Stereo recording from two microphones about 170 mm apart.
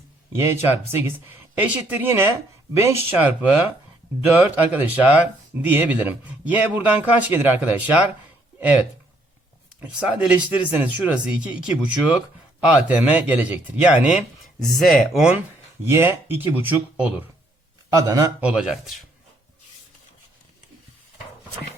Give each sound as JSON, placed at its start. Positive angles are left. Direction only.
{"t": 0.3, "sound": "speech", "side_deg": -15}
{"t": 9.8, "sound": "a man's voice", "side_deg": -5}
{"t": 18.3, "sound": "speech", "side_deg": -5}